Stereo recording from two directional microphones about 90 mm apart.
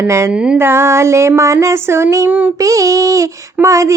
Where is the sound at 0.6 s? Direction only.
30° right (ahead or behind).